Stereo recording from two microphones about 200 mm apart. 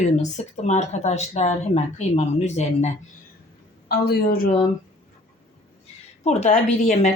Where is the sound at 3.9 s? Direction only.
50° left (ahead or behind).